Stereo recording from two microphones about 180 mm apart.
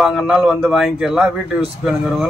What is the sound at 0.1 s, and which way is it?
A man's voice, 5° right (ahead or behind).